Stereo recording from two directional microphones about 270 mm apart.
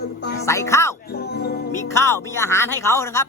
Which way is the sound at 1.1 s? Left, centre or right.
Left.